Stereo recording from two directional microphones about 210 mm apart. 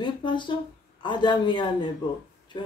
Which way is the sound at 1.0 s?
20° left (ahead or behind).